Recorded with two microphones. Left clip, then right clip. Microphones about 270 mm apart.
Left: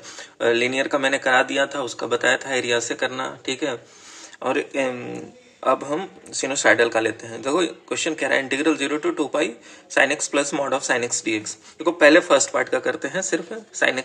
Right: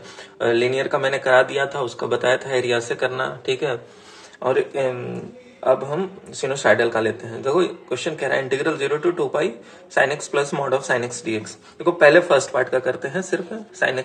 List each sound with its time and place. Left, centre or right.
0.4 s speech: left